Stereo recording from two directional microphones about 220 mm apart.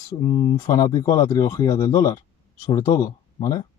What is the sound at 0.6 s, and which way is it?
Speech, 15° left (ahead or behind).